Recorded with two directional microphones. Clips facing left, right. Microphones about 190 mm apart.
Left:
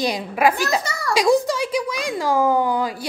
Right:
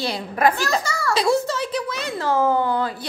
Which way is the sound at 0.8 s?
20° left (ahead or behind).